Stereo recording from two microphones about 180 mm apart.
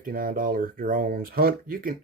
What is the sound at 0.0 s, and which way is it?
Speech, 50° right (ahead or behind).